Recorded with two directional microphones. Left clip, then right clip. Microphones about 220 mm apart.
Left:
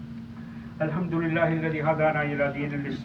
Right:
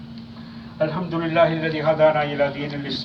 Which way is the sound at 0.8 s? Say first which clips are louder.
Right 5 dB; 20° left (ahead or behind).